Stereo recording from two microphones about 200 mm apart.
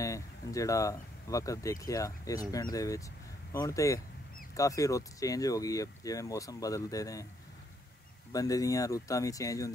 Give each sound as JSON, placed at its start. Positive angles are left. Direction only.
{"t": 0.0, "sound": "speech", "side_deg": 15}
{"t": 8.3, "sound": "speech", "side_deg": 15}